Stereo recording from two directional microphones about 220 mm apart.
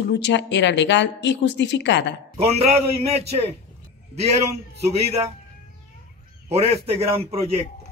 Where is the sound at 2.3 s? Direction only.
30° right (ahead or behind).